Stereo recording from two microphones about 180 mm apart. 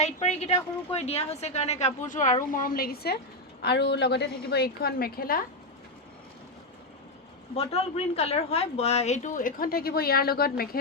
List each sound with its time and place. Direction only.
0.0 s a woman's voice: 35° left (ahead or behind); by 5.5 s 55° left (ahead or behind)
7.5 s a woman's voice: 35° left (ahead or behind); by 10.5 s 60° left (ahead or behind)